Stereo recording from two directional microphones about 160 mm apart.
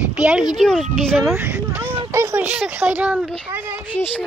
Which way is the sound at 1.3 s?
10° right (ahead or behind).